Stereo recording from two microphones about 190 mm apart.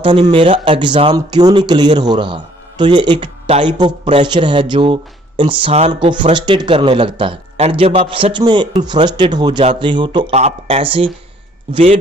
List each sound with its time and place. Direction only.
0.0 s speech: 25° right (ahead or behind)